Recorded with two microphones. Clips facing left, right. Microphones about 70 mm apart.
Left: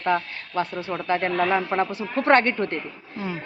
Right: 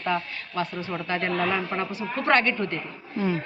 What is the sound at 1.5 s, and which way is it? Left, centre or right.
Speech, left.